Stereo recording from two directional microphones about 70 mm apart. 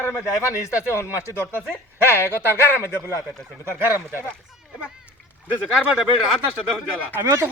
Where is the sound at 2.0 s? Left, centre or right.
Left.